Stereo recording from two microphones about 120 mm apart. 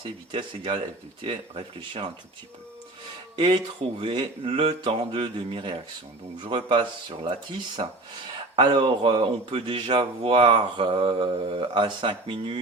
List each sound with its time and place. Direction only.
0.0 s speech: 45° right (ahead or behind)
3.3 s speech: 40° right (ahead or behind)